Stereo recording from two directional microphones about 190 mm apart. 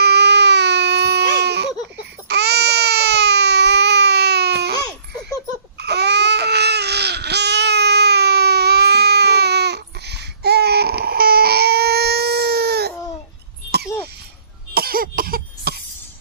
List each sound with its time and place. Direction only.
0.0 s baby cry: 60° right (ahead or behind)
5.8 s babbling: 60° right (ahead or behind)
14.7 s cough: 50° right (ahead or behind)